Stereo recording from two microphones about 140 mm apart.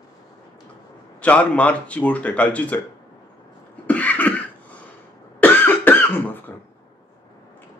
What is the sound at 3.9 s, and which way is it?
Cough, 10° left (ahead or behind).